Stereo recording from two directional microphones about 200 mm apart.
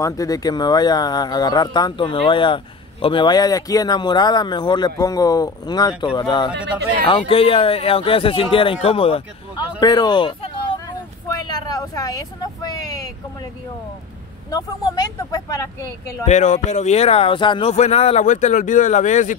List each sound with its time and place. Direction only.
0.0 s speech: 15° left (ahead or behind)
11.2 s vehicle: 20° left (ahead or behind)
14.5 s speech: 20° left (ahead or behind)
16.3 s speech: 35° left (ahead or behind)